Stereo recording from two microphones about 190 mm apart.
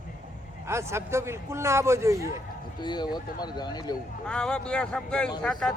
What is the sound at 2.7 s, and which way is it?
Speech, 25° left (ahead or behind).